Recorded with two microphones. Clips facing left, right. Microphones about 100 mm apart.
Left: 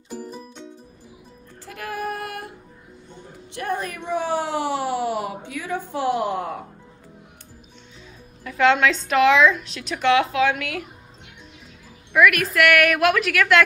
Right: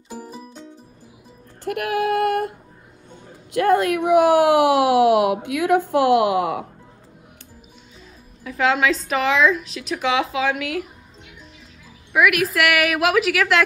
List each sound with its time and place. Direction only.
0.1 s music: 5° right (ahead or behind)
1.6 s female singing: 65° right (ahead or behind)
3.5 s speech: 75° right (ahead or behind)
8.5 s a woman's voice: centre (ahead or behind)
12.1 s a woman's voice: 5° right (ahead or behind)